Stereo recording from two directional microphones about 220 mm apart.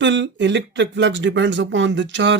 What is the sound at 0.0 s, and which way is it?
Speech, 55° right (ahead or behind).